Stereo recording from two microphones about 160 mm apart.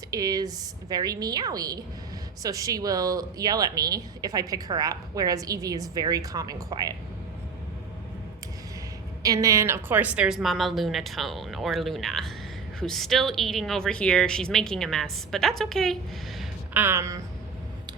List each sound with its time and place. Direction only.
0.1 s speech: 25° right (ahead or behind)
9.2 s speech: 20° right (ahead or behind); by 16.0 s centre (ahead or behind)
16.4 s a sound: 10° right (ahead or behind)